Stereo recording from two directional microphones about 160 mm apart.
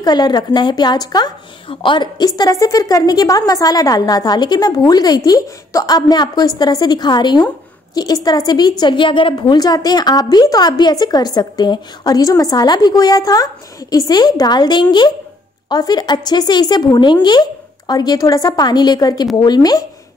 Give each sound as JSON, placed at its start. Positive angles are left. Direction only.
{"t": 0.0, "sound": "a woman's voice", "side_deg": 25}